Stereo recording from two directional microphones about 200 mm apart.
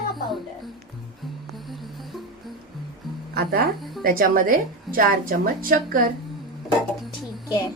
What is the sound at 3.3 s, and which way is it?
Speech, 50° right (ahead or behind).